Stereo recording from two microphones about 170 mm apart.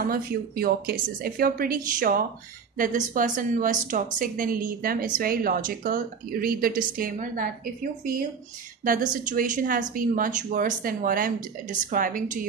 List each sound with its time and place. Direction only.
0.1 s a woman's voice: 60° right (ahead or behind)
8.8 s a woman's voice: 55° right (ahead or behind)